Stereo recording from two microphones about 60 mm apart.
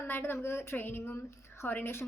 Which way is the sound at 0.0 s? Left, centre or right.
Left.